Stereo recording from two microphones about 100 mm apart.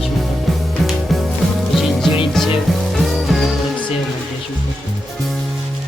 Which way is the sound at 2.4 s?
5° left (ahead or behind).